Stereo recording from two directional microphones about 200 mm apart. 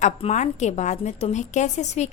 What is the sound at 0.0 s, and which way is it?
A woman's voice, 35° left (ahead or behind).